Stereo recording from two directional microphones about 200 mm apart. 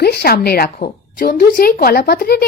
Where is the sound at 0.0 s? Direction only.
55° left (ahead or behind).